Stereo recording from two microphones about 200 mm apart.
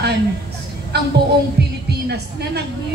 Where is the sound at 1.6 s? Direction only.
55° right (ahead or behind).